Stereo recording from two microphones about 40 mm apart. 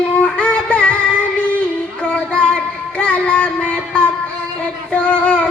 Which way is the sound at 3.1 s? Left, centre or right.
Left.